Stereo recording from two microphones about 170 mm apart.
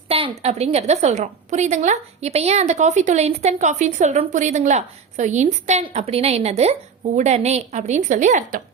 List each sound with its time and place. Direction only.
0.1 s a woman's voice: 35° right (ahead or behind); by 8.6 s 50° right (ahead or behind)